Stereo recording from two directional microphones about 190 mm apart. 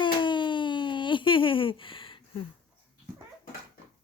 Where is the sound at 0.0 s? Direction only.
25° left (ahead or behind).